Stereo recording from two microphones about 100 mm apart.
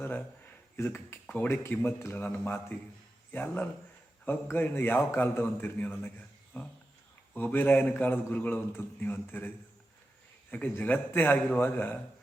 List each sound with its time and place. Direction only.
0.0 s a sound: 20° left (ahead or behind)
1.6 s a man's voice: 20° left (ahead or behind)
10.5 s a man's voice: 15° left (ahead or behind)